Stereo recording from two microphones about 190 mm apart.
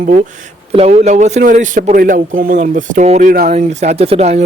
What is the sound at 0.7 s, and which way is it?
Speech, 35° right (ahead or behind).